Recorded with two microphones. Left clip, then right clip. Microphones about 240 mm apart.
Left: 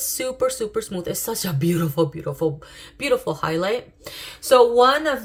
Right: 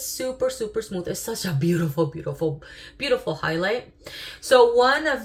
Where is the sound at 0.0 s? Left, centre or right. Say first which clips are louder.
Left 2 dB; left.